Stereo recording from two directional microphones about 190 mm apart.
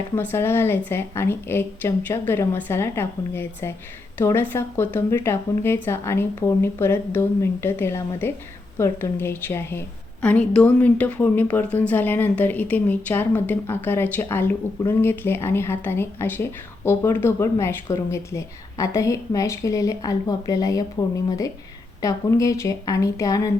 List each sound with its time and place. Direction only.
0.2 s a woman's voice: 10° left (ahead or behind)